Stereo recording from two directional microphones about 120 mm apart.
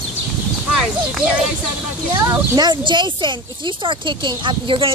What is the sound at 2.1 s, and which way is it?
Speech, 35° right (ahead or behind).